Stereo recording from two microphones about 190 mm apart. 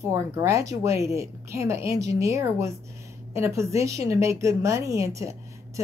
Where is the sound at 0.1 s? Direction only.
15° right (ahead or behind).